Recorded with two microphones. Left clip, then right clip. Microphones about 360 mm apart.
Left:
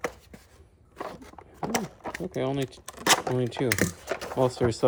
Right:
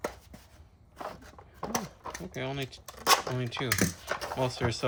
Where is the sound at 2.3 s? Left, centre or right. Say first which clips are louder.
Left 7 dB; centre.